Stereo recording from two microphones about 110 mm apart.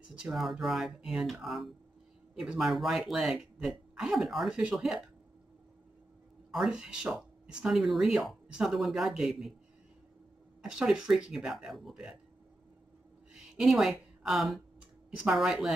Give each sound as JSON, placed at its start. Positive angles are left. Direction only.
{"t": 0.2, "sound": "speech", "side_deg": 0}
{"t": 6.5, "sound": "speech", "side_deg": -5}
{"t": 10.6, "sound": "speech", "side_deg": -5}
{"t": 13.3, "sound": "a woman's voice", "side_deg": -5}